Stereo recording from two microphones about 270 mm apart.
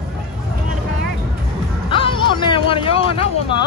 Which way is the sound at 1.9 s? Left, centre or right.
Centre.